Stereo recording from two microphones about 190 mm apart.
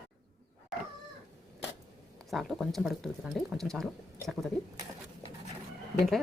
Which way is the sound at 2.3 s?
Centre (ahead or behind).